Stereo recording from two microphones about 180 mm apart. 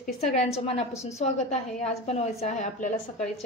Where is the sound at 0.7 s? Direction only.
35° left (ahead or behind).